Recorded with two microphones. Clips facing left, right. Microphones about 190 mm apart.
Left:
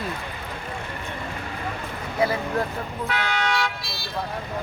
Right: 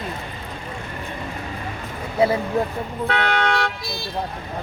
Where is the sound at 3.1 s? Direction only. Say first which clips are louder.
Right 5 dB; 60° right (ahead or behind).